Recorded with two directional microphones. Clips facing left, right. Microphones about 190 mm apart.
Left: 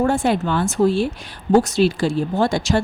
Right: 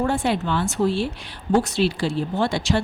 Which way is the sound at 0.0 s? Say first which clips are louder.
Left 4 dB; 45° left (ahead or behind).